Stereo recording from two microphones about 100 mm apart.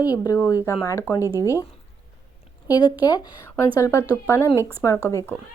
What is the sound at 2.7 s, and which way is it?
Speech, 40° left (ahead or behind).